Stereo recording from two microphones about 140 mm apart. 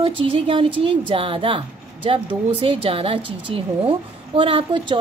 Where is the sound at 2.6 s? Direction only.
40° right (ahead or behind).